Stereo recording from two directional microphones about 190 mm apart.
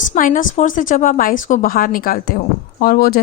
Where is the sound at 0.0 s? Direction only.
45° left (ahead or behind).